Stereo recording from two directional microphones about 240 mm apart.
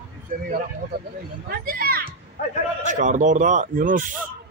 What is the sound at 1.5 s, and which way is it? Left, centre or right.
A man's voice, right.